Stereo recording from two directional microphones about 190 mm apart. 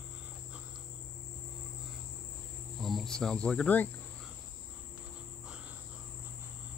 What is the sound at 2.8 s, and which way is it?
Cricket, centre (ahead or behind).